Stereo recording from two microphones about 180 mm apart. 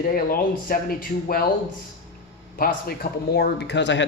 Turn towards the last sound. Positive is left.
turn(degrees=85)